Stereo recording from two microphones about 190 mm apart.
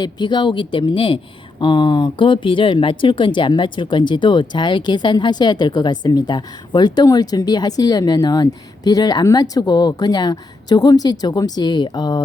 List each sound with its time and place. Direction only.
0.0 s speech: 25° left (ahead or behind)